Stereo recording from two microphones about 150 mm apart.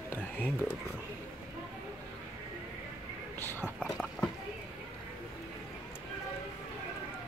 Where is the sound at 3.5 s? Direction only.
15° right (ahead or behind).